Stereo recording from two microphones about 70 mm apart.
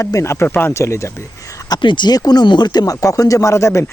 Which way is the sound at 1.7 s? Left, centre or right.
Left.